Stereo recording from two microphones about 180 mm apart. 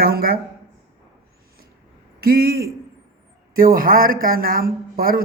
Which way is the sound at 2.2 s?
55° right (ahead or behind).